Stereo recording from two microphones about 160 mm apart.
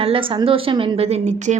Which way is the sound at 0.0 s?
35° right (ahead or behind).